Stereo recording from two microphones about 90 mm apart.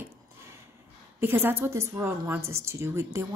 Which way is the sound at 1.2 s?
25° right (ahead or behind).